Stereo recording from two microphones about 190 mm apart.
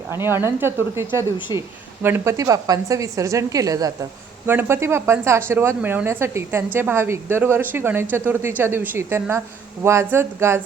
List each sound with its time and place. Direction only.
0.1 s speech: 10° right (ahead or behind)